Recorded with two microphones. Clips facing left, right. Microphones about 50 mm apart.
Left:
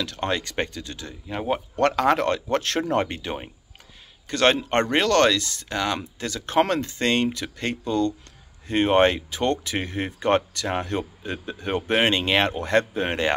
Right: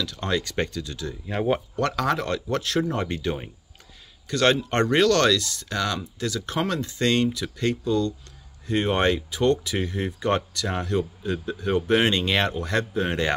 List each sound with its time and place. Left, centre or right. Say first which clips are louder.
0.0 s speech: left 3 dB; left
0.3 s speech: right 5 dB; left
1.3 s speech: right 2 dB; centre
1.8 s speech: left 4 dB; left
3.1 s speech: right 3 dB; left
4.3 s speech: left 1 dB; left